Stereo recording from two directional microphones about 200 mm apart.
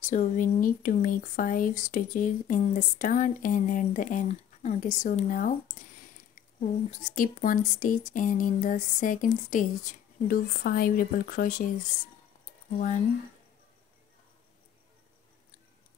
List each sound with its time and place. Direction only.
0.0 s speech: 40° left (ahead or behind)
6.9 s speech: 40° left (ahead or behind)
12.7 s speech: 40° left (ahead or behind)